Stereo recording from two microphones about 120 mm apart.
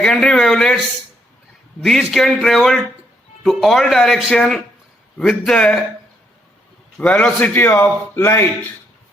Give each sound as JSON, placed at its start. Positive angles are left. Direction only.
{"t": 0.0, "sound": "speech", "side_deg": 5}
{"t": 1.8, "sound": "speech", "side_deg": 0}
{"t": 7.0, "sound": "a man's voice", "side_deg": 10}